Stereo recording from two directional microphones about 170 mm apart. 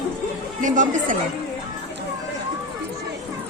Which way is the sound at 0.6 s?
50° right (ahead or behind).